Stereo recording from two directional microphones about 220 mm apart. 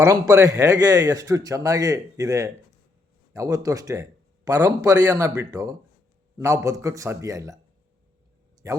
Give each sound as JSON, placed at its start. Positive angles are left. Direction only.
{"t": 0.0, "sound": "a man's voice", "side_deg": -15}
{"t": 8.6, "sound": "a man's voice", "side_deg": -15}